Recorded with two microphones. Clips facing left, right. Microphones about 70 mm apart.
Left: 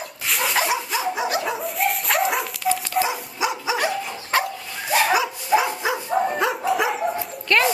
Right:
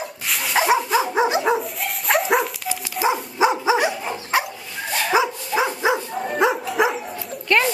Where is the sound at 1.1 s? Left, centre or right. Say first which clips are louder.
Right 6 dB; right.